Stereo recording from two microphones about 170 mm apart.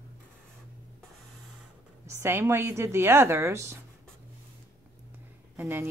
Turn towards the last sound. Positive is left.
turn(degrees=-15)  # may be behind; listen again after turning